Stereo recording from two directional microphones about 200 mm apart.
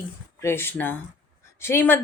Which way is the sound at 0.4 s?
10° left (ahead or behind).